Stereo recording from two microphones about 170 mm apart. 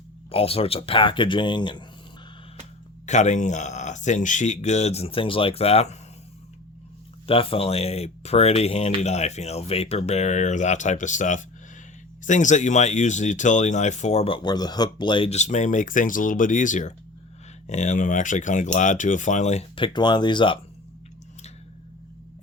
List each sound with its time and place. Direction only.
0.3 s speech: 35° left (ahead or behind)
3.1 s speech: 45° left (ahead or behind)
7.3 s speech: 35° left (ahead or behind)